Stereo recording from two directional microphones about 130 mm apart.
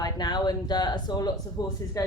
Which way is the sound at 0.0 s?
30° left (ahead or behind).